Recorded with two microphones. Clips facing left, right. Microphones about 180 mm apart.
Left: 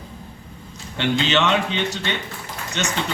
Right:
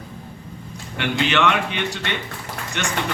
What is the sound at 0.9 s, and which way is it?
A man's voice, 25° left (ahead or behind).